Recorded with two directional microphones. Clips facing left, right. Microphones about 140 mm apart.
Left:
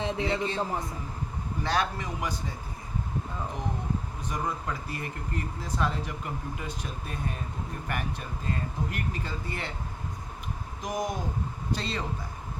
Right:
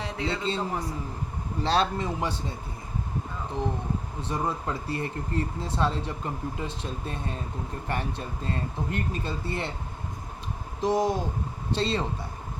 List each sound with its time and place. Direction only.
0.0 s a man's voice: 20° left (ahead or behind)
1.6 s speech: 30° right (ahead or behind)
4.2 s speech: 30° right (ahead or behind)
10.8 s speech: 30° right (ahead or behind)